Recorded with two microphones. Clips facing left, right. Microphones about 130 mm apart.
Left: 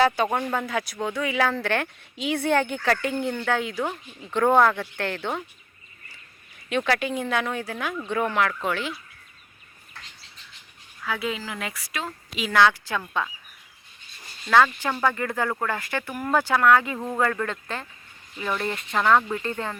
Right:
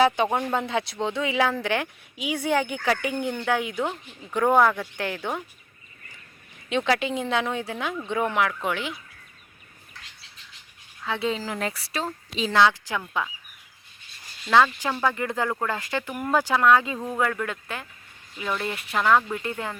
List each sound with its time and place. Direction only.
0.0 s speech: 15° right (ahead or behind)
6.7 s speech: 20° right (ahead or behind)
11.0 s speech: 25° right (ahead or behind)
14.5 s speech: 15° right (ahead or behind)
17.2 s speech: 10° right (ahead or behind)